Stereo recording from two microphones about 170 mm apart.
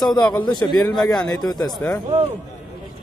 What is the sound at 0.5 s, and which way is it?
A man's voice, 25° left (ahead or behind).